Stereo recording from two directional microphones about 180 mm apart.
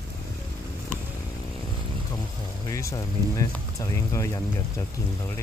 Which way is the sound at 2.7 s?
20° left (ahead or behind).